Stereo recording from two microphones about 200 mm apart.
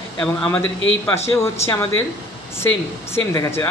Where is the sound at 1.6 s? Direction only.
15° left (ahead or behind).